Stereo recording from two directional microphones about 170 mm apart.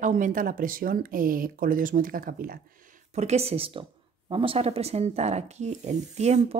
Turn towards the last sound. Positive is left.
turn(degrees=-45)  # may be behind; listen again after turning